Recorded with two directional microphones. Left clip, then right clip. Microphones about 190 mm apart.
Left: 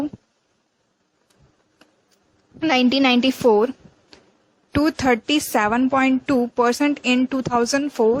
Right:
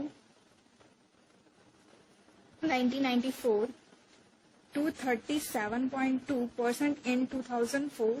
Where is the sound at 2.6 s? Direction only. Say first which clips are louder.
Left 13 dB; 55° left (ahead or behind).